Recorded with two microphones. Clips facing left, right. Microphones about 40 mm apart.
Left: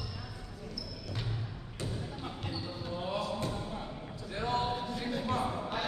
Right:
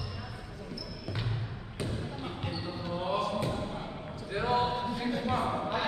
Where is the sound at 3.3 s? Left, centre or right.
Centre.